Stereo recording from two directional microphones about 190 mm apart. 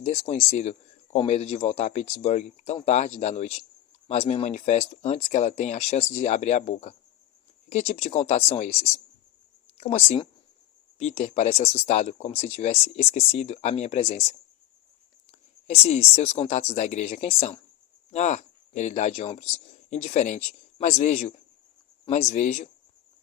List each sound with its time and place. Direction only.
0.0 s speech: 35° left (ahead or behind)